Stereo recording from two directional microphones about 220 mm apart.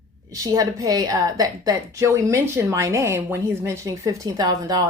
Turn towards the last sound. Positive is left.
turn(degrees=-15)  # may be behind; listen again after turning